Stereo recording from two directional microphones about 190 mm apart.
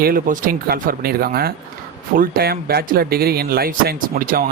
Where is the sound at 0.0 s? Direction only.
50° right (ahead or behind).